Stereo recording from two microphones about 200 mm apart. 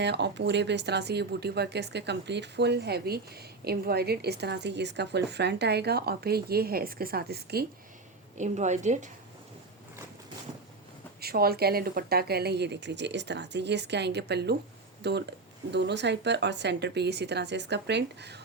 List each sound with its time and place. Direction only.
0.0 s speech: 60° right (ahead or behind)
8.4 s a woman's voice: 35° right (ahead or behind)
11.2 s speech: 50° right (ahead or behind)